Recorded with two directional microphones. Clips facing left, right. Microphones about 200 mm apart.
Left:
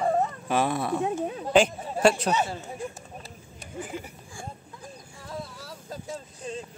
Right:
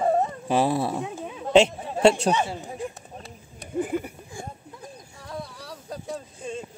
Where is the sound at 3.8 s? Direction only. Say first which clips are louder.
Right 9 dB; 55° right (ahead or behind).